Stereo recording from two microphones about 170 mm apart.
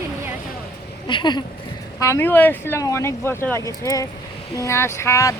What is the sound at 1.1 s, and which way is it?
Speech, 25° left (ahead or behind).